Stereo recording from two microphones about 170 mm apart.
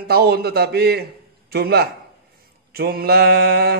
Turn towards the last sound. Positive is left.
turn(degrees=-70)  # may be behind; listen again after turning